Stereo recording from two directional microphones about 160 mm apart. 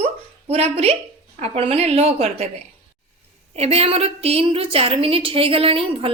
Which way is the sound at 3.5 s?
40° right (ahead or behind).